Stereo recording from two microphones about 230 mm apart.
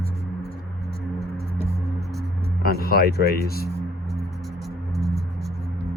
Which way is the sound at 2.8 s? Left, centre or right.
Left.